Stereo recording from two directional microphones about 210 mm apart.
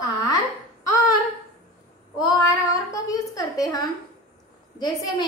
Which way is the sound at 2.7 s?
15° left (ahead or behind).